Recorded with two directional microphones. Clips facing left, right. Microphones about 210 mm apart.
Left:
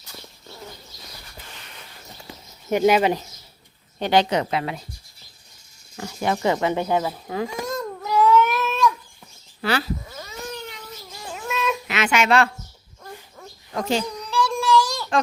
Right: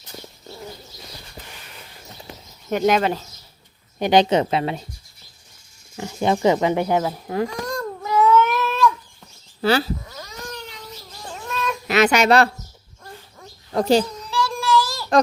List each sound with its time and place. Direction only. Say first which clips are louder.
2.6 s speech: left 1 dB; 10° left (ahead or behind)
4.0 s a woman's voice: right 3 dB; 20° right (ahead or behind)
6.0 s speech: right 4 dB; 20° right (ahead or behind)
7.4 s baby cry: right 1 dB; 5° left (ahead or behind)
8.4 s cat: right 1 dB; centre (ahead or behind)
9.6 s speech: right 5 dB; 30° right (ahead or behind)
10.1 s cat: left 1 dB; 5° left (ahead or behind)
11.9 s speech: right 6 dB; 40° right (ahead or behind)
13.7 s speech: right 7 dB; 35° right (ahead or behind)
14.3 s child singing: left 1 dB; centre (ahead or behind)